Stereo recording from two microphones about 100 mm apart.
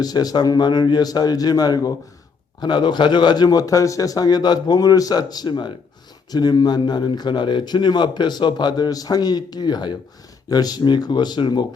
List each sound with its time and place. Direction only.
0.0 s a man's voice: 40° left (ahead or behind)